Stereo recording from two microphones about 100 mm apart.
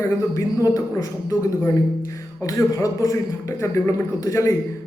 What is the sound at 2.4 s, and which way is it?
Speech, 30° left (ahead or behind).